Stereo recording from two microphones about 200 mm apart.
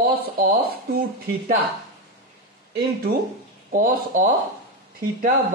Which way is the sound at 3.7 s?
45° right (ahead or behind).